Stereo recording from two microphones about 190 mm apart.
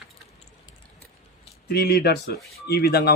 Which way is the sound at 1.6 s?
55° left (ahead or behind).